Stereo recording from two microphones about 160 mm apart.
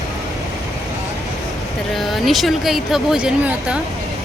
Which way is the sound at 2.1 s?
Centre (ahead or behind).